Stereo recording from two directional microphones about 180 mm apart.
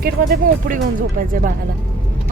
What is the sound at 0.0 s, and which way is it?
Speech, 50° right (ahead or behind).